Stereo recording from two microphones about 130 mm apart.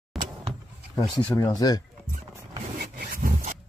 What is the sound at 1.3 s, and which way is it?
Speech, 30° left (ahead or behind).